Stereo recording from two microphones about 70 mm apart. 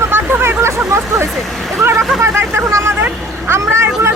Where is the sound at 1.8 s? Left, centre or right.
Right.